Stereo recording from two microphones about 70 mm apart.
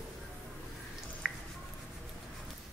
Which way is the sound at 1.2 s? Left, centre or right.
Centre.